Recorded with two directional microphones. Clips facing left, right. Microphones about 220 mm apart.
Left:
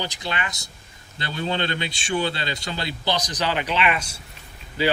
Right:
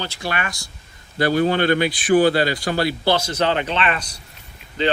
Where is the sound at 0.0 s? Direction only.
20° left (ahead or behind).